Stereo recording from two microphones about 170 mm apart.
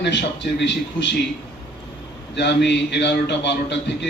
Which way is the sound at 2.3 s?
90° left.